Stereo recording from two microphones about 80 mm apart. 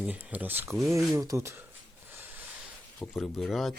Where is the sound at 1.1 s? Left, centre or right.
Right.